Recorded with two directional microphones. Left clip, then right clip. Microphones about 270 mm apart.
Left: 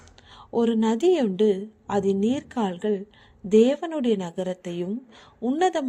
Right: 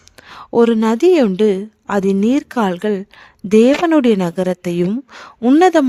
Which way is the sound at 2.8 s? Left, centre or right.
Right.